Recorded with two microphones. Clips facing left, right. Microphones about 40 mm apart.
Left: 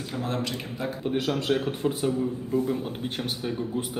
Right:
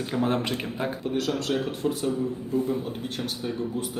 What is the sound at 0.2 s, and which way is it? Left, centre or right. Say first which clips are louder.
Speech: right 4 dB; right.